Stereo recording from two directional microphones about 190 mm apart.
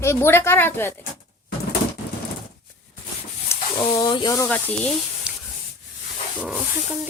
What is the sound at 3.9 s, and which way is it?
Speech, 25° left (ahead or behind).